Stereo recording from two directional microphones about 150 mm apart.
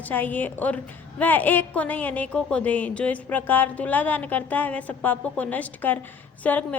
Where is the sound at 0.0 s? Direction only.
10° left (ahead or behind).